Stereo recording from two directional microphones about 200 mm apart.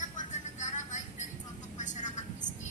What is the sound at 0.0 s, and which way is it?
Vehicle, 40° left (ahead or behind).